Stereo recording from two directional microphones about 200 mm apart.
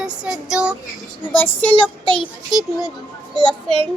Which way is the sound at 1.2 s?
10° left (ahead or behind).